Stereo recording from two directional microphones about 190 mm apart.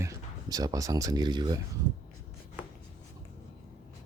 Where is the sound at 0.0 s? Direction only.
20° right (ahead or behind).